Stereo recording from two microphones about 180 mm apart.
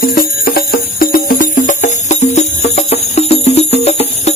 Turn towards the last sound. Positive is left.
turn(degrees=35)  # may be behind; listen again after turning